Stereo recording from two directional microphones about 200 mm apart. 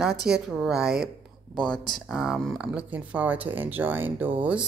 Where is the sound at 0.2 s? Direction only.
Centre (ahead or behind).